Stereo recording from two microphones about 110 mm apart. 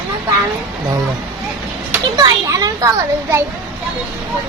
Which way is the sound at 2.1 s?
35° right (ahead or behind).